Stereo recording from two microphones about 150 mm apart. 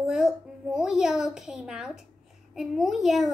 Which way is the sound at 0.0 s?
5° right (ahead or behind).